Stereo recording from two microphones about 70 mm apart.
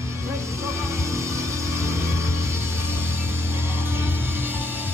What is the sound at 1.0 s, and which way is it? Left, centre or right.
Music, right.